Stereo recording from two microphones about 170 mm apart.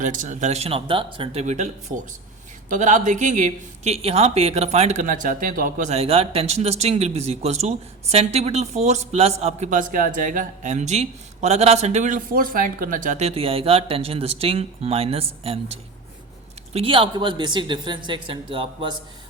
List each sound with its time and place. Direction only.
0.0 s speech: 50° right (ahead or behind); by 18.9 s 30° right (ahead or behind)